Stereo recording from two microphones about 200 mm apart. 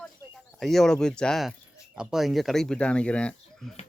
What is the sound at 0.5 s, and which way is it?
Speech, centre (ahead or behind).